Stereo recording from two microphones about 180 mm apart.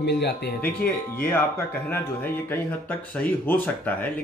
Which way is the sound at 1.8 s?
10° left (ahead or behind).